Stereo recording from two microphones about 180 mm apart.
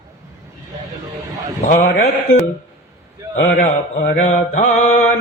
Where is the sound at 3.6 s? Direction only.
40° left (ahead or behind).